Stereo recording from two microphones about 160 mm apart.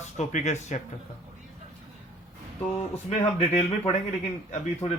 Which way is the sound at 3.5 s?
45° left (ahead or behind).